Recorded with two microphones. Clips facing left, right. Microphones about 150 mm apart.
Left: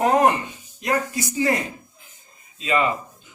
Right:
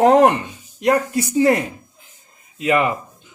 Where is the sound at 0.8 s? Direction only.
65° right (ahead or behind).